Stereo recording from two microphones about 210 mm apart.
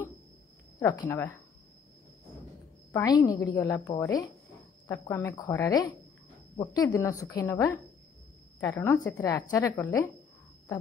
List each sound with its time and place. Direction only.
0.7 s speech: 15° left (ahead or behind)
2.9 s speech: 15° left (ahead or behind)